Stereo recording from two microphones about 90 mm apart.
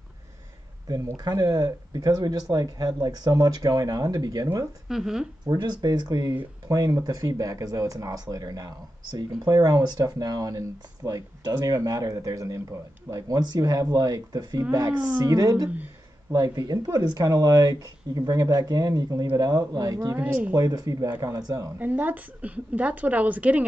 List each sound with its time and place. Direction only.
0.8 s speech: 40° right (ahead or behind)
4.8 s speech: 5° right (ahead or behind)
5.4 s speech: 50° right (ahead or behind)
20.2 s a woman's voice: 15° right (ahead or behind)
20.5 s speech: 45° right (ahead or behind)
21.7 s a woman's voice: 20° right (ahead or behind)